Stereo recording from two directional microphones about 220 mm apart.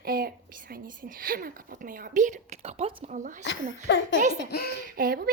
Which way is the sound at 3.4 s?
55° left (ahead or behind).